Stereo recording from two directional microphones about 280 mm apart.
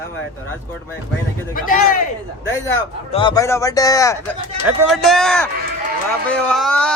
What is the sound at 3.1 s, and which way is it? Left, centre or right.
Speech, centre.